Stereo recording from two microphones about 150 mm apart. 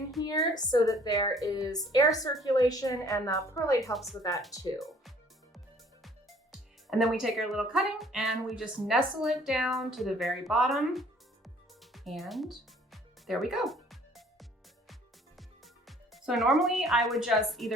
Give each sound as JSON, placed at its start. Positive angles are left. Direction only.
{"t": 0.2, "sound": "a woman's voice", "side_deg": 25}
{"t": 3.9, "sound": "speech", "side_deg": 0}
{"t": 4.2, "sound": "a woman's voice", "side_deg": 25}
{"t": 4.8, "sound": "music", "side_deg": 0}
{"t": 6.0, "sound": "speech", "side_deg": 0}
{"t": 11.4, "sound": "music", "side_deg": 0}